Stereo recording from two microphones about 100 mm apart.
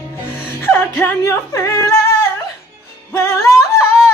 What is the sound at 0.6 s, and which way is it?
Speech, 25° left (ahead or behind).